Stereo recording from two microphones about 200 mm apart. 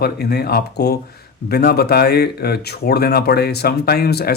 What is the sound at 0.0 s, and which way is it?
Speech, 55° left (ahead or behind).